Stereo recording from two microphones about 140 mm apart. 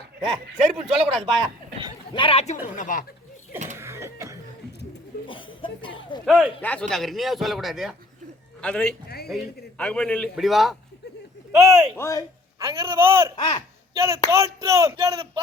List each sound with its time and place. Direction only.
0.6 s speech: 5° right (ahead or behind)
2.1 s a man's voice: 40° left (ahead or behind)
2.7 s speech: 65° left (ahead or behind)
3.8 s a sound: 20° right (ahead or behind)
5.3 s a sound: 35° left (ahead or behind)
6.2 s speech: 5° right (ahead or behind)
6.6 s a man's voice: 10° left (ahead or behind)
11.5 s speech: 25° right (ahead or behind)
11.9 s speech: 20° left (ahead or behind)
12.5 s speech: 25° right (ahead or behind)
13.3 s speech: 35° left (ahead or behind)
13.9 s speech: 25° right (ahead or behind)